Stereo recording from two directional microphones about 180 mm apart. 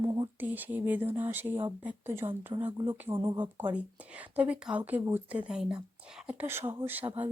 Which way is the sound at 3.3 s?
10° right (ahead or behind).